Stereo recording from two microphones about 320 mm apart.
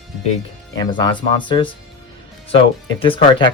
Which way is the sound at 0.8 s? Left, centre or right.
Centre.